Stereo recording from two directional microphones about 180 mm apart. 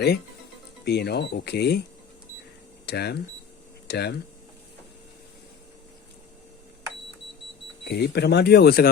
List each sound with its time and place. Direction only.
0.9 s speech: 65° left (ahead or behind)
2.8 s speech: 65° left (ahead or behind)
7.9 s speech: 65° left (ahead or behind)